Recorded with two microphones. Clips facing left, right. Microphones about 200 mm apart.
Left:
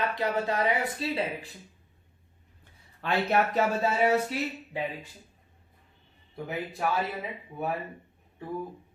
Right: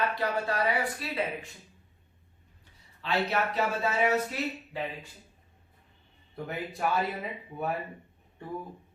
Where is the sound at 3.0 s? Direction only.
50° left (ahead or behind).